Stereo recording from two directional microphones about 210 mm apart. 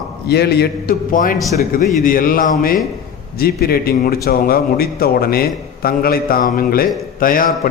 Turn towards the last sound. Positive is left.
turn(degrees=40)  # may be behind; listen again after turning